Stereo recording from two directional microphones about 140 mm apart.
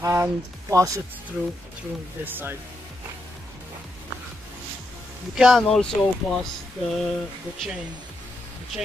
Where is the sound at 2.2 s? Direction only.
15° right (ahead or behind).